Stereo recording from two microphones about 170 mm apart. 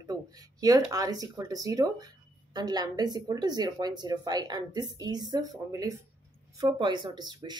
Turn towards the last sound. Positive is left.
turn(degrees=-25)  # may be behind; listen again after turning